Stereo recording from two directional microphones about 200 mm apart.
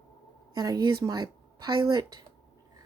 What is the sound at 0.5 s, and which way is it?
Speech, 20° right (ahead or behind).